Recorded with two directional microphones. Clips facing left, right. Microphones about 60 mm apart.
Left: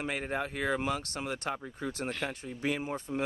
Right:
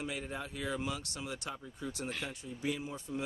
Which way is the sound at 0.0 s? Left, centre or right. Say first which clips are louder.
Left 6 dB; left.